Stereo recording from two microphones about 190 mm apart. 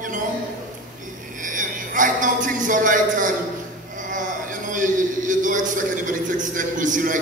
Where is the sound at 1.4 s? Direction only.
45° right (ahead or behind).